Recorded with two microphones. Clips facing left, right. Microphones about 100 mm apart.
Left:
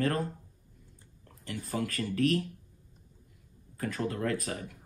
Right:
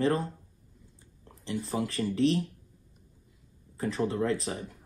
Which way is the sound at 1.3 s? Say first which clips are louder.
Right 4 dB; 25° right (ahead or behind).